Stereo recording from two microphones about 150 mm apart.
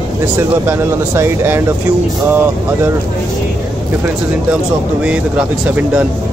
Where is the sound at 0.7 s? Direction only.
15° right (ahead or behind).